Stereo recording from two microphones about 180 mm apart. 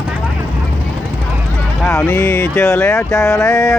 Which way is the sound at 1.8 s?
10° left (ahead or behind).